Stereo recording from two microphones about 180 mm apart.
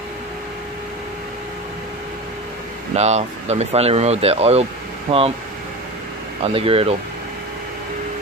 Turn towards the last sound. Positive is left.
turn(degrees=-30)  # may be behind; listen again after turning